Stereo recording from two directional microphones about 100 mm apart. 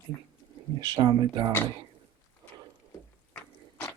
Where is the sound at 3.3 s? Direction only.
20° left (ahead or behind).